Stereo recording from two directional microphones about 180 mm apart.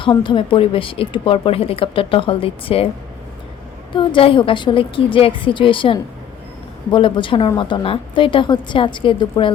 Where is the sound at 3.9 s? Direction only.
30° left (ahead or behind).